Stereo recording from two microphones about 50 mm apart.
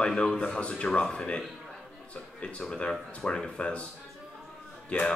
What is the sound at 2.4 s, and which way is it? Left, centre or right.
Speech, left.